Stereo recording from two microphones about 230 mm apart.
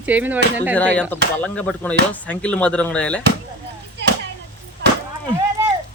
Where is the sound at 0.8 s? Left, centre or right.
Centre.